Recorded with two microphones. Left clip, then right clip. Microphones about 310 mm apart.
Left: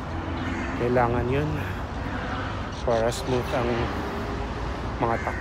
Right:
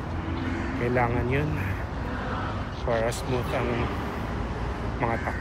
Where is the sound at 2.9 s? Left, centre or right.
Centre.